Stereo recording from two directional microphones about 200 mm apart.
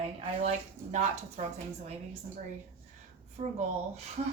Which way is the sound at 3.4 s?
30° right (ahead or behind).